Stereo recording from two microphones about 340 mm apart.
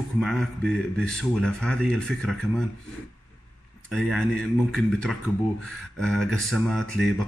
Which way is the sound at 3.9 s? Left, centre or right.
Centre.